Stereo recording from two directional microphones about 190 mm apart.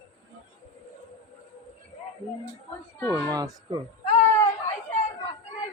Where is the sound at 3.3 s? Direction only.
20° right (ahead or behind).